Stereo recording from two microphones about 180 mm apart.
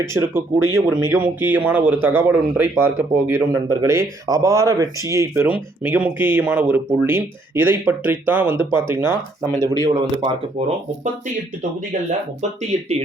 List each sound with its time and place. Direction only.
0.0 s a man's voice: 15° right (ahead or behind)